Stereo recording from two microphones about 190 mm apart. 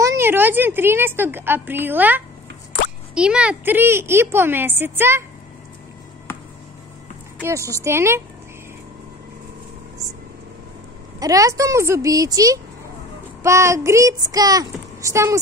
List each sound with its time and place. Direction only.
0.0 s a woman's voice: 15° right (ahead or behind)
7.4 s a woman's voice: 15° right (ahead or behind)
11.1 s a woman's voice: 20° right (ahead or behind)